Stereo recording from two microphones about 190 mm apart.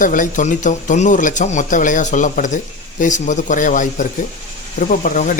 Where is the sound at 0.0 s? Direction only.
45° left (ahead or behind).